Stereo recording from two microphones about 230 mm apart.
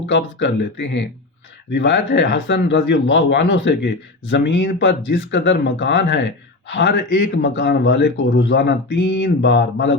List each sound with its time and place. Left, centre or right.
0.1 s speech: left